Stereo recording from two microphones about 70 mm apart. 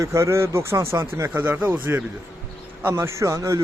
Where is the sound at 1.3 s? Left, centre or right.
Right.